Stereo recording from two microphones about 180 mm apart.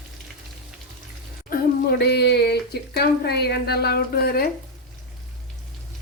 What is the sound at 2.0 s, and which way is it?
Speech, 65° left (ahead or behind).